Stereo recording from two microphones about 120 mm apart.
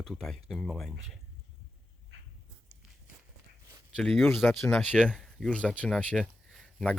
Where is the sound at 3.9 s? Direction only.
5° left (ahead or behind).